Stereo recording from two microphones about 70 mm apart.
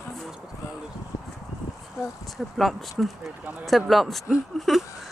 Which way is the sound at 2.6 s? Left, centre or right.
Centre.